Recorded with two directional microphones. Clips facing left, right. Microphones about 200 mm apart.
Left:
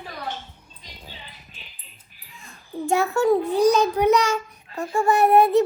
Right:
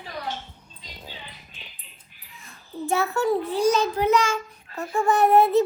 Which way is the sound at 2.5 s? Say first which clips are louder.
Left 3 dB; 15° left (ahead or behind).